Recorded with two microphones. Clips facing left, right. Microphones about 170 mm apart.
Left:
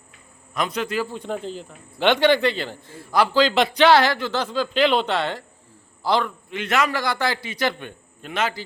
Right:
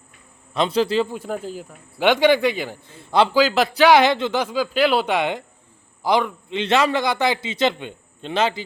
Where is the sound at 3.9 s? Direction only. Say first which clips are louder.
Right 2 dB; 20° right (ahead or behind).